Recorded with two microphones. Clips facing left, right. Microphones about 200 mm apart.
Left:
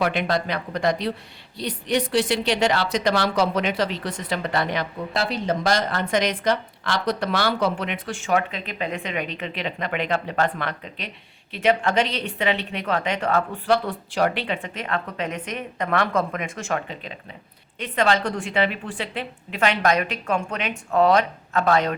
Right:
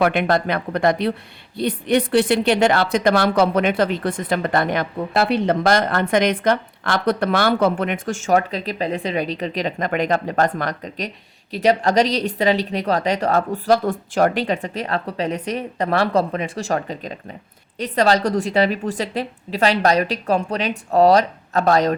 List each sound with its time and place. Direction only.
0.0 s a woman's voice: 55° right (ahead or behind); by 21.9 s 40° right (ahead or behind)